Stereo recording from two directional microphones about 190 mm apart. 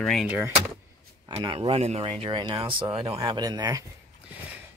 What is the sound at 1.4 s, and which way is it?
Speech, 30° right (ahead or behind).